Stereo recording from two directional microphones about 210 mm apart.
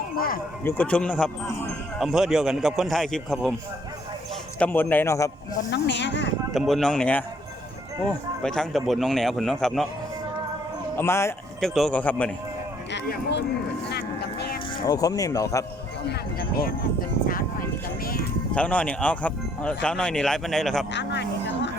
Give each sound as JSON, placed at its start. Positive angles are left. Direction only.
{"t": 0.6, "sound": "speech", "side_deg": 10}
{"t": 4.6, "sound": "speech", "side_deg": 10}
{"t": 5.7, "sound": "speech", "side_deg": 55}
{"t": 6.5, "sound": "speech", "side_deg": 0}
{"t": 8.4, "sound": "speech", "side_deg": 5}
{"t": 10.9, "sound": "speech", "side_deg": 10}
{"t": 11.6, "sound": "speech", "side_deg": 0}
{"t": 12.9, "sound": "speech", "side_deg": 55}
{"t": 13.9, "sound": "vehicle", "side_deg": 50}
{"t": 14.8, "sound": "speech", "side_deg": 15}
{"t": 18.0, "sound": "speech", "side_deg": 45}
{"t": 18.5, "sound": "speech", "side_deg": 5}
{"t": 20.9, "sound": "speech", "side_deg": 55}